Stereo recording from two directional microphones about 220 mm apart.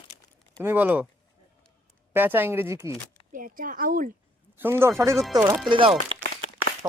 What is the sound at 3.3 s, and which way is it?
Speech, 40° right (ahead or behind).